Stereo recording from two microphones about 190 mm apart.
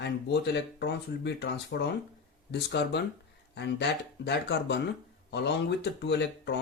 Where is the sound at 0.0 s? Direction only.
60° left (ahead or behind).